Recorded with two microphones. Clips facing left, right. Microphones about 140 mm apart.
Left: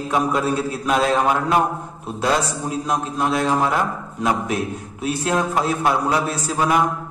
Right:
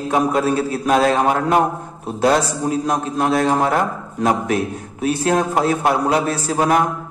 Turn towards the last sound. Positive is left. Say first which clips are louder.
# right 2 dB
turn(degrees=-50)  # may be behind; listen again after turning